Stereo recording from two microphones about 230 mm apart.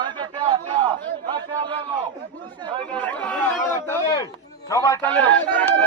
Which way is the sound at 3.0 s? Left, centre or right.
Centre.